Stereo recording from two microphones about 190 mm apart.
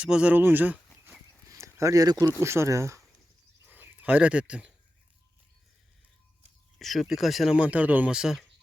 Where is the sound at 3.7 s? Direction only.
10° right (ahead or behind).